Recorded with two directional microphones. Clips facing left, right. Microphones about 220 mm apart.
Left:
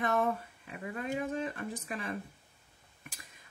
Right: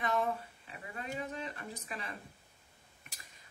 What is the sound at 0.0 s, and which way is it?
A woman's voice, 55° left (ahead or behind).